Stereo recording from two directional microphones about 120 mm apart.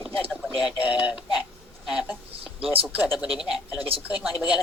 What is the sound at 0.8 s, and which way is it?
Synthetic singing, 10° right (ahead or behind).